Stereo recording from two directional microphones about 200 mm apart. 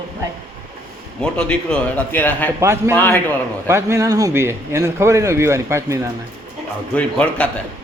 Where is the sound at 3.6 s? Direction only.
15° right (ahead or behind).